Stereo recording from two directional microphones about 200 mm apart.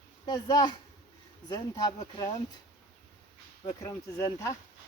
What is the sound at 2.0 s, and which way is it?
Speech, 25° left (ahead or behind).